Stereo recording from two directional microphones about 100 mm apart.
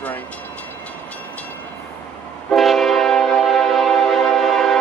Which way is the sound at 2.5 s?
Centre (ahead or behind).